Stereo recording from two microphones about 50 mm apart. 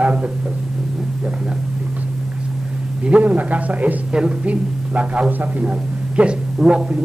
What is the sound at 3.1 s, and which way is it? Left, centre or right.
A man's voice, right.